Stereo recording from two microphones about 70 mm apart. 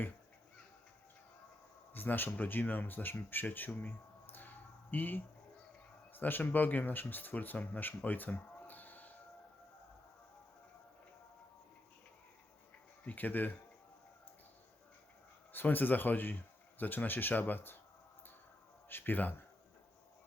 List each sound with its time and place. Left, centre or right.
1.9 s speech: left
13.1 s speech: left
15.5 s speech: left
18.9 s speech: left